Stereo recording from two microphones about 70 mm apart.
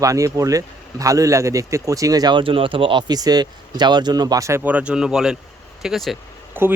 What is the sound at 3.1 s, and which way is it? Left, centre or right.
Speech, right.